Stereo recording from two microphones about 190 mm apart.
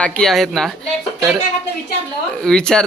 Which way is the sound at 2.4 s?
5° left (ahead or behind).